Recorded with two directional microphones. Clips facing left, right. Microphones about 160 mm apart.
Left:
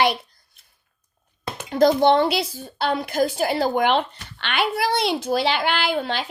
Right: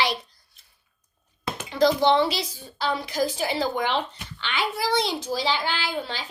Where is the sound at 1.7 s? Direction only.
50° left (ahead or behind).